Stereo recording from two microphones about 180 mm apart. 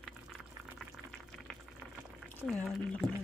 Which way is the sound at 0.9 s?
5° left (ahead or behind).